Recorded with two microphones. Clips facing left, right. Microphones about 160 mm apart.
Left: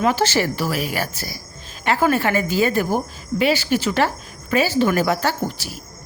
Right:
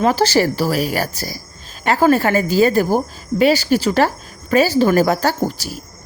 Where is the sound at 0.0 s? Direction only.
35° right (ahead or behind).